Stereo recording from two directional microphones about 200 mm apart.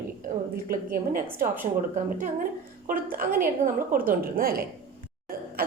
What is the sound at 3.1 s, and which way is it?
A woman's voice, 45° right (ahead or behind).